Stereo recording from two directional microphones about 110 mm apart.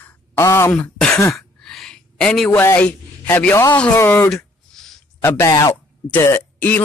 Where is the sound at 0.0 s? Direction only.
15° left (ahead or behind).